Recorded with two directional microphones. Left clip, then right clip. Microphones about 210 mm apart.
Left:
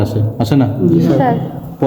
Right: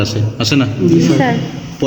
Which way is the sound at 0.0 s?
55° left (ahead or behind).